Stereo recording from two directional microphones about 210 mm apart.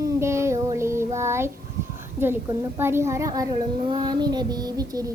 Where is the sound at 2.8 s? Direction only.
10° right (ahead or behind).